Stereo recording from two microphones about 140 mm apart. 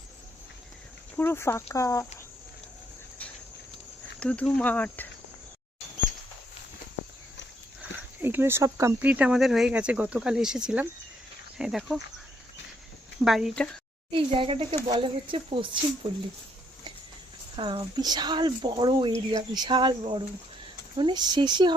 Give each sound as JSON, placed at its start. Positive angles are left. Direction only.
{"t": 1.1, "sound": "speech", "side_deg": 15}
{"t": 4.2, "sound": "cricket", "side_deg": 10}
{"t": 7.8, "sound": "speech", "side_deg": -15}
{"t": 13.2, "sound": "speech", "side_deg": 0}
{"t": 14.1, "sound": "speech", "side_deg": -40}
{"t": 17.6, "sound": "speech", "side_deg": -35}